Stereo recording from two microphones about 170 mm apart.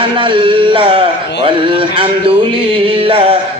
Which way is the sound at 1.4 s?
30° right (ahead or behind).